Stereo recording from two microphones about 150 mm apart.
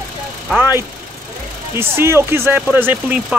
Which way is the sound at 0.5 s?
15° right (ahead or behind).